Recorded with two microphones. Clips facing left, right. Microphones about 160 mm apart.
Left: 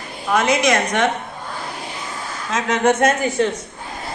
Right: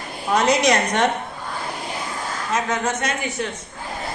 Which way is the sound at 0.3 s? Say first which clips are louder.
Left 1 dB; 55° left (ahead or behind).